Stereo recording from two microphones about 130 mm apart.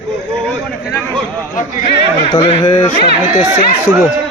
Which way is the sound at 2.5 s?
45° left (ahead or behind).